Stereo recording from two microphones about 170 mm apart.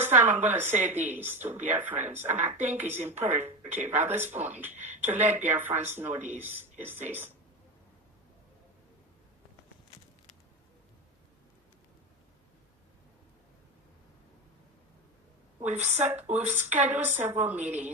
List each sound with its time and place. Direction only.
0.0 s a woman's voice: 10° right (ahead or behind)
15.7 s a woman's voice: 40° right (ahead or behind)
16.3 s a woman's voice: 10° right (ahead or behind)